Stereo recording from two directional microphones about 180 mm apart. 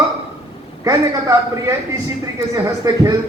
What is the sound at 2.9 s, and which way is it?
Speech, 20° right (ahead or behind).